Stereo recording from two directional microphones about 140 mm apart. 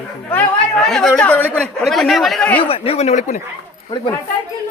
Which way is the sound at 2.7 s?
45° left (ahead or behind).